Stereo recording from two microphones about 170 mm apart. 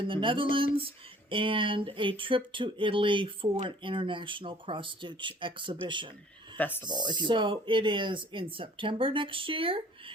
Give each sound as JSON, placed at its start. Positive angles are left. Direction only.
{"t": 0.0, "sound": "speech", "side_deg": -30}
{"t": 6.6, "sound": "speech", "side_deg": 10}
{"t": 7.1, "sound": "speech", "side_deg": -30}